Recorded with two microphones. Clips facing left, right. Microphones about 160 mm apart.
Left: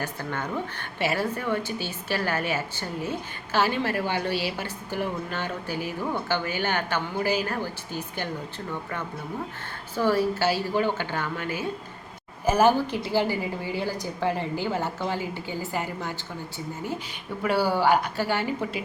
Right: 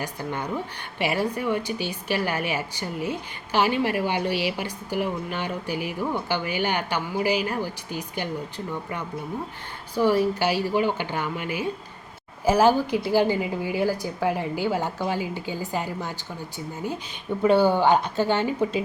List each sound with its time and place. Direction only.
0.0 s a woman's voice: 15° right (ahead or behind)
17.4 s speech: 20° right (ahead or behind)